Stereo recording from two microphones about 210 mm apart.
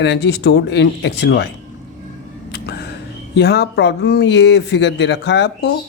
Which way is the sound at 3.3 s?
50° left (ahead or behind).